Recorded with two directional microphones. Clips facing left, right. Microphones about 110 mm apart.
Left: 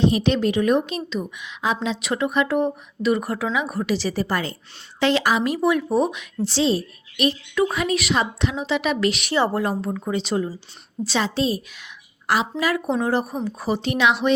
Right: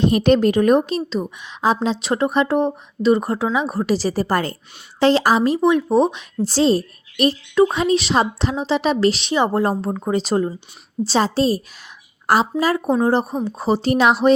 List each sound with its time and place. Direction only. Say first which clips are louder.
0.0 s a woman's voice: right 4 dB; 50° right (ahead or behind); by 6.2 s 30° right (ahead or behind)
6.4 s a woman's voice: right 4 dB; 45° right (ahead or behind)
9.3 s a woman's voice: right 2 dB; 15° right (ahead or behind)
9.6 s a woman's voice: right 4 dB; 35° right (ahead or behind)